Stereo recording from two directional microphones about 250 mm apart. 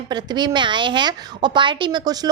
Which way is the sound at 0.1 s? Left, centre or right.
Centre.